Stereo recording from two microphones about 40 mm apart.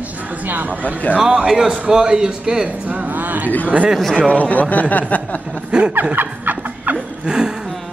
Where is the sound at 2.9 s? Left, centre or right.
Right.